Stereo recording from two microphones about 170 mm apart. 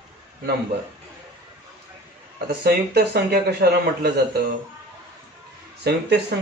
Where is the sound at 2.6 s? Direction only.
75° right (ahead or behind).